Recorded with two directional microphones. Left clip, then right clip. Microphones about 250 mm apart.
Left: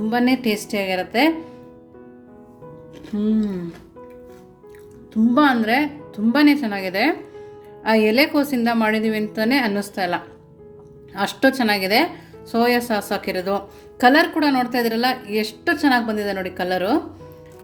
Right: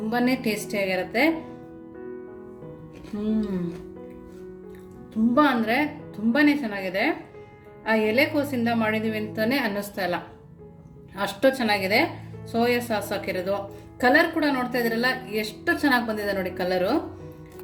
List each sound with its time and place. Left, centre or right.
0.1 s a woman's voice: left
3.2 s a woman's voice: left
5.1 s a woman's voice: left